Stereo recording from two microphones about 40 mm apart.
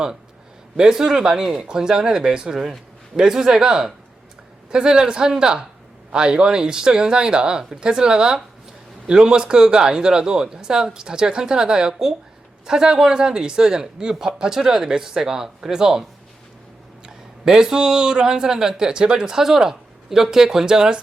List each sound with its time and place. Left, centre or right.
0.8 s a man's voice: centre
17.1 s speech: centre